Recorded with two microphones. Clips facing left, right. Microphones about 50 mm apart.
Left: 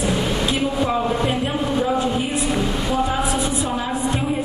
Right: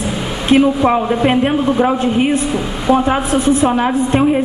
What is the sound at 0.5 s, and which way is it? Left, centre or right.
A man's voice, right.